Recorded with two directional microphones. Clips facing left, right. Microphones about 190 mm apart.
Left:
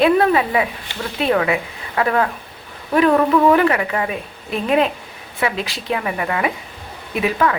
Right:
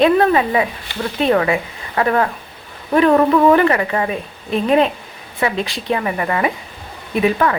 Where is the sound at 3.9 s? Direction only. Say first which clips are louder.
Right 2 dB; 30° right (ahead or behind).